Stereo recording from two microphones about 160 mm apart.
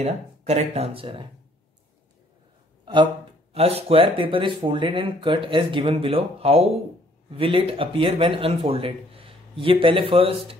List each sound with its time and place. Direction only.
0.0 s speech: 45° right (ahead or behind)
2.8 s a sound: 30° right (ahead or behind)
3.5 s speech: 40° right (ahead or behind)